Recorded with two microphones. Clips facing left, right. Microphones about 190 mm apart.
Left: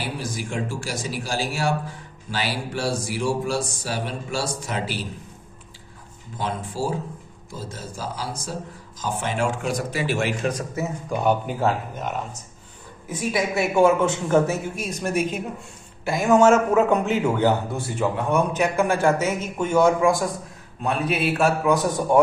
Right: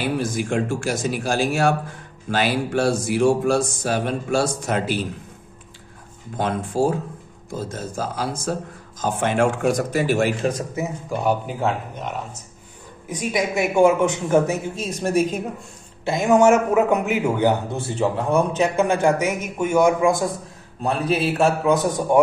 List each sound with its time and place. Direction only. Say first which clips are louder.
0.0 s speech: right 7 dB; 55° right (ahead or behind)
6.3 s speech: right 6 dB; 55° right (ahead or behind); by 10.5 s 35° right (ahead or behind)
11.1 s speech: left 1 dB; centre (ahead or behind)
13.1 s a man's voice: right 1 dB; 20° right (ahead or behind); by 15.4 s 35° right (ahead or behind)
16.1 s a man's voice: right 1 dB; 20° right (ahead or behind)
20.8 s a man's voice: right 2 dB; 35° right (ahead or behind); by 22.2 s 15° right (ahead or behind)